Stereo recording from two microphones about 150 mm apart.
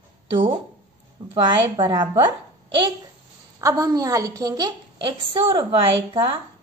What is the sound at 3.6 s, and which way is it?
A woman's voice, 20° right (ahead or behind).